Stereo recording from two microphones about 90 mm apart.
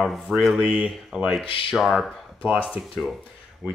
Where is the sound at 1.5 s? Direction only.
80° left.